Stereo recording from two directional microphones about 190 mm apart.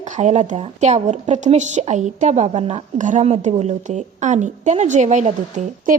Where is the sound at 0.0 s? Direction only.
40° right (ahead or behind).